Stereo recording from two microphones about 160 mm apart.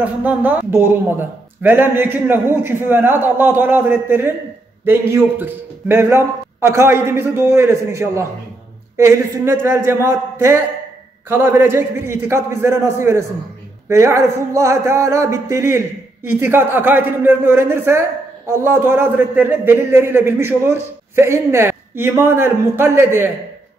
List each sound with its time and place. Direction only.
0.0 s a man's voice: 10° right (ahead or behind)